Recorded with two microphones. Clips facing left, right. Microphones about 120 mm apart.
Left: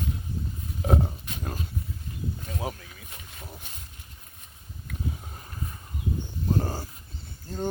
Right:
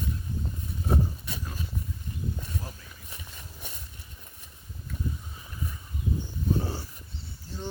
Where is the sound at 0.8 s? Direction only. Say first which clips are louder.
Left 3 dB; 65° left (ahead or behind).